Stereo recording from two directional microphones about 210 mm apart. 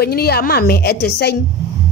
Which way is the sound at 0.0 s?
50° left (ahead or behind).